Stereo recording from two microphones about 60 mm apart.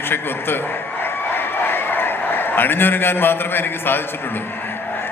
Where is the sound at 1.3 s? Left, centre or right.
Left.